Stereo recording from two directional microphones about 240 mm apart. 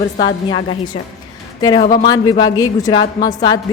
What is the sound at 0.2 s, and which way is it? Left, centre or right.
A woman's voice, left.